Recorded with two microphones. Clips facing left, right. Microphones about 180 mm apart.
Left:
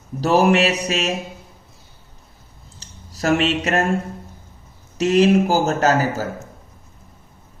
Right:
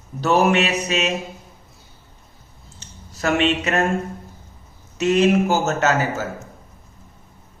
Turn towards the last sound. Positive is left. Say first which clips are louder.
# left 2 dB
turn(degrees=35)  # may be behind; listen again after turning